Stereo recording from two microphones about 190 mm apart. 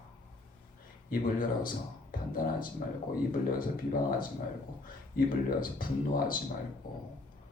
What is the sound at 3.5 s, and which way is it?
Speech, 50° left (ahead or behind).